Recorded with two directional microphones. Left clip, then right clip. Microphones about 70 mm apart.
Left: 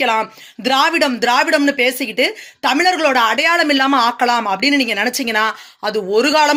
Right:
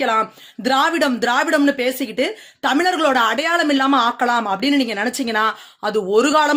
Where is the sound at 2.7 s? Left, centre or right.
Right.